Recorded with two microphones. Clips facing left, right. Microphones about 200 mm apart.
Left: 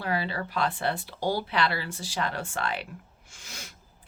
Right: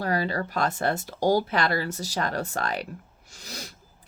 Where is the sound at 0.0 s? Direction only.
45° right (ahead or behind).